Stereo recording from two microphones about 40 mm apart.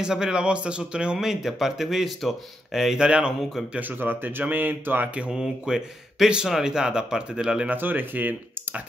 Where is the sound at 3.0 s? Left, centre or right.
Right.